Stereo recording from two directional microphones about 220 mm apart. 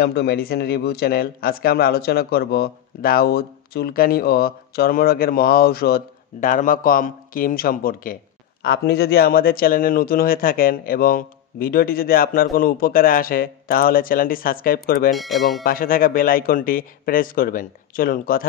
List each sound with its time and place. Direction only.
0.0 s speech: 50° left (ahead or behind)
15.1 s speech: centre (ahead or behind)
15.6 s speech: 40° left (ahead or behind)